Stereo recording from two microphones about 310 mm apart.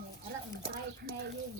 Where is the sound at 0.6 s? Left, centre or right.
Right.